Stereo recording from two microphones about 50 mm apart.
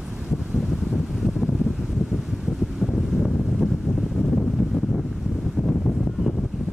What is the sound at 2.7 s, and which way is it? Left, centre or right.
Wind noise, centre.